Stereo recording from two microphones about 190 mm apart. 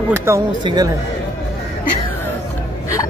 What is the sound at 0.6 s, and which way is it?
Speech, 25° right (ahead or behind).